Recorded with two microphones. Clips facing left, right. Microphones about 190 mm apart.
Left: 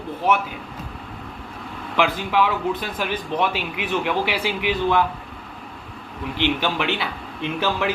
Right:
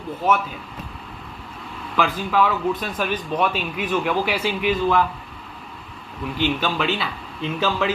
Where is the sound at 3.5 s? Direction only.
15° left (ahead or behind).